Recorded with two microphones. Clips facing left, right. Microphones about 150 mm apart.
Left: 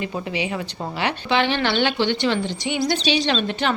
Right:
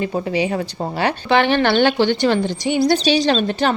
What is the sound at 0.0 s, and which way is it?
A woman's voice, 40° right (ahead or behind).